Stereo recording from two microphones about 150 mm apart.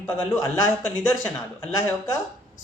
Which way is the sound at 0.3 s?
20° left (ahead or behind).